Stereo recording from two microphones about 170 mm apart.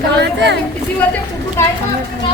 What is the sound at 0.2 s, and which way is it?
Speech, 90° right.